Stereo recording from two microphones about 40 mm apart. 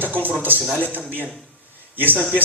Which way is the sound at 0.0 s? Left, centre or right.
Right.